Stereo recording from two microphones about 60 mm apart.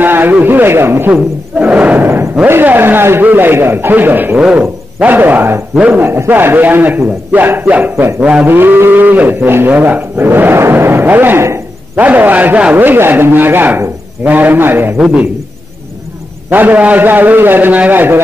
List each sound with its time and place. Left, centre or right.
0.0 s a man's voice: right
1.7 s a man's voice: right
4.4 s speech: centre
5.0 s a man's voice: right
5.8 s a man's voice: right
6.0 s a man's voice: right
8.5 s a man's voice: right
11.4 s a sound: right
12.0 s a man's voice: right
16.4 s a man's voice: right